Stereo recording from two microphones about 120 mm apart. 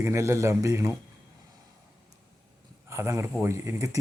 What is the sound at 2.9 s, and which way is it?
Speech, 25° right (ahead or behind).